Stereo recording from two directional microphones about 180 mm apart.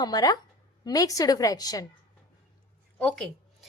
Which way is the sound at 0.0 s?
20° left (ahead or behind).